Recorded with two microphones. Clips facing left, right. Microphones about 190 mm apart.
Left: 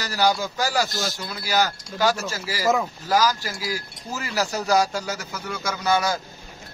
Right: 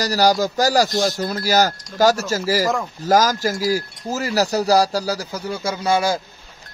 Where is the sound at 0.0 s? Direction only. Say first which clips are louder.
Right 5 dB; 40° right (ahead or behind).